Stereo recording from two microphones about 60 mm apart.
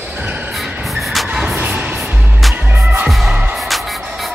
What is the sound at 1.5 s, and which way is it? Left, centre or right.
Music, right.